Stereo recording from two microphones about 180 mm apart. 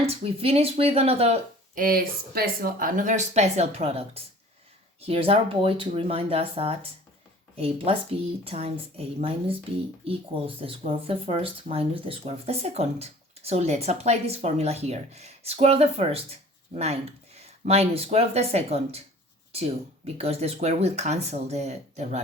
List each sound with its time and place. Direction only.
0.0 s speech: 35° right (ahead or behind)
1.7 s speech: 50° right (ahead or behind); by 19.0 s 35° right (ahead or behind)
20.1 s speech: 35° right (ahead or behind)